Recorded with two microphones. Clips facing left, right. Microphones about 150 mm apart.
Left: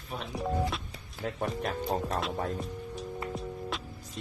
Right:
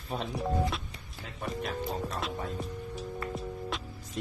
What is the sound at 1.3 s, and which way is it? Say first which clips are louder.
Speech: even; 65° left (ahead or behind).